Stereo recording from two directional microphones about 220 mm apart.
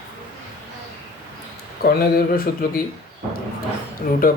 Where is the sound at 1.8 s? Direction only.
45° left (ahead or behind).